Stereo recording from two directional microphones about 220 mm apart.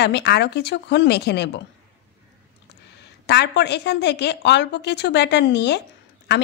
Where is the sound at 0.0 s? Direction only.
50° left (ahead or behind).